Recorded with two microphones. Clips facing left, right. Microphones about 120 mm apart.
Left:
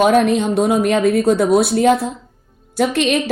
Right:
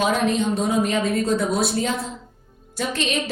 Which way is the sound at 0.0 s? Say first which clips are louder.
Left 7 dB; 70° left (ahead or behind).